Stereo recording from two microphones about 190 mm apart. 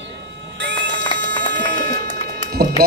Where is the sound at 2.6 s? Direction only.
50° right (ahead or behind).